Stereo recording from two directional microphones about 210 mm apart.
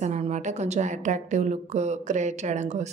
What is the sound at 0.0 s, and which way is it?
Speech, 30° right (ahead or behind).